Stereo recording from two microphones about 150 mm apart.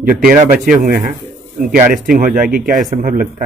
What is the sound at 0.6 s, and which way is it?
Speech, 65° right (ahead or behind).